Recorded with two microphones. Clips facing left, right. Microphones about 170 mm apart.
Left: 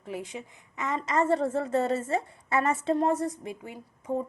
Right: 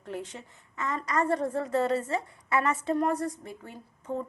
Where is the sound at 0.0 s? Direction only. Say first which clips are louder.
Left 1 dB; 10° left (ahead or behind).